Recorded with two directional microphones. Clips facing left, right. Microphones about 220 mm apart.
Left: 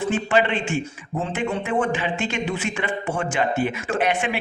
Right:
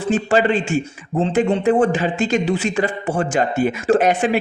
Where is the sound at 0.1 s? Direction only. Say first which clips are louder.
Right 6 dB; 40° right (ahead or behind).